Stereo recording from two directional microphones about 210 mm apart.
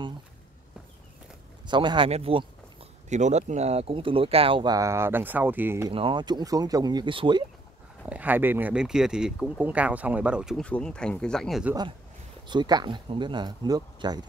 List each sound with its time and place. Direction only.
1.7 s speech: 20° right (ahead or behind)
5.9 s speech: 25° right (ahead or behind)
8.0 s speech: 5° right (ahead or behind)
12.4 s speech: 20° right (ahead or behind)